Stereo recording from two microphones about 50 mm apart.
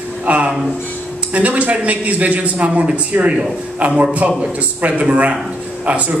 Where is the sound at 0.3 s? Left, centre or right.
Right.